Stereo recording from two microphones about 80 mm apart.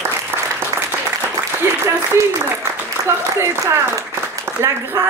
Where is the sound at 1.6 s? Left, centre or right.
Right.